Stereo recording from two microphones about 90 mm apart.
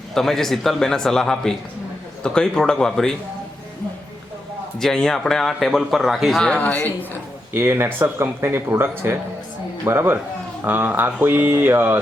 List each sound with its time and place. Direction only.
0.1 s a man's voice: 5° left (ahead or behind)
4.8 s a man's voice: 5° left (ahead or behind)
6.5 s speech: 15° left (ahead or behind)
7.5 s speech: 25° right (ahead or behind)